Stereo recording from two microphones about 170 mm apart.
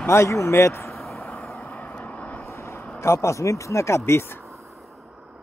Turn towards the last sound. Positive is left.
turn(degrees=15)  # may be behind; listen again after turning